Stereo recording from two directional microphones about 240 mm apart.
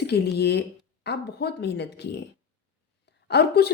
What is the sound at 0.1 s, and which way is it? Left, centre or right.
A woman's voice, left.